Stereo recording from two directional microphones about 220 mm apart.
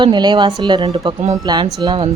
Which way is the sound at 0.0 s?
20° right (ahead or behind).